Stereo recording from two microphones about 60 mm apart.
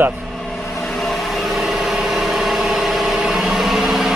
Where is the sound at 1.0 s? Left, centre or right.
Centre.